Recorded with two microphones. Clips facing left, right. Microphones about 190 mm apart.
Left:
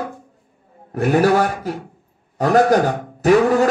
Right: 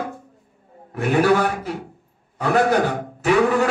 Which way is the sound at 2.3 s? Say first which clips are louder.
Left 4 dB; 40° left (ahead or behind).